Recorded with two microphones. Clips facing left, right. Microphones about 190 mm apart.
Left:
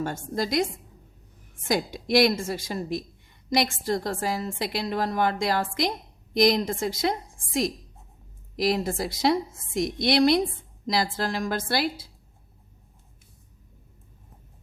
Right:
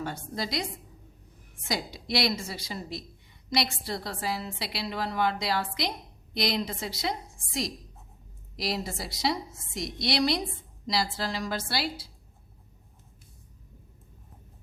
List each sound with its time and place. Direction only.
0.0 s a woman's voice: 50° left (ahead or behind)